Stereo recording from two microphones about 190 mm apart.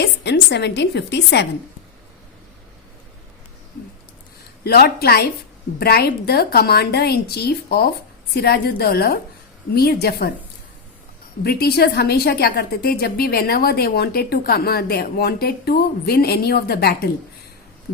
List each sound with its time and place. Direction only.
0.0 s a woman's voice: 60° left (ahead or behind)
4.6 s a woman's voice: 55° left (ahead or behind)
11.4 s a woman's voice: 55° left (ahead or behind)